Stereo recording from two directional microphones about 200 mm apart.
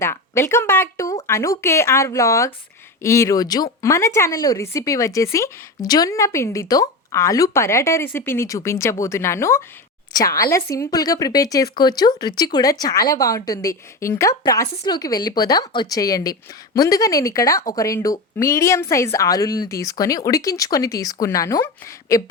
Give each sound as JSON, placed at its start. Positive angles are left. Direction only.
{"t": 0.0, "sound": "a woman's voice", "side_deg": 10}